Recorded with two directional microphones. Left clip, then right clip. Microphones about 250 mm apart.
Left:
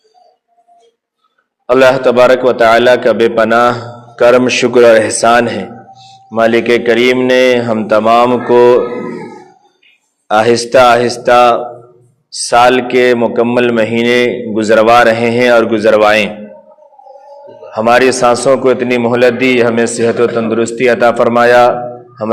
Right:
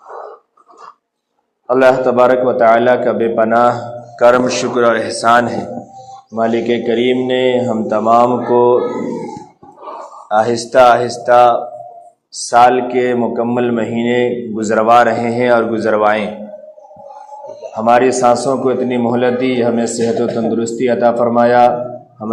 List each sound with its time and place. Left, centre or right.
1.7 s a man's voice: left
10.2 s a man's voice: left
17.7 s a man's voice: left